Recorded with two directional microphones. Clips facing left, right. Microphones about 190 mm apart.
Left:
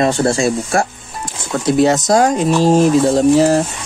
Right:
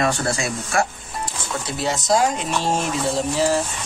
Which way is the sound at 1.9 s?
45° left (ahead or behind).